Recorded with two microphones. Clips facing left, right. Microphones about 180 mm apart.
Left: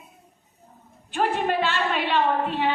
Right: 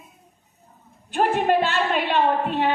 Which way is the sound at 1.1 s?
45° right (ahead or behind).